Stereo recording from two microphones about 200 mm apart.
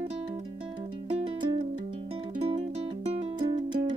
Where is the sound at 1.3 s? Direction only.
25° right (ahead or behind).